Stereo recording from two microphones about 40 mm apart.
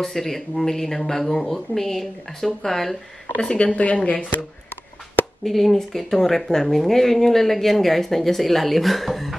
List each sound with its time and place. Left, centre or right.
0.0 s speech: centre
3.3 s speech: left
5.4 s speech: centre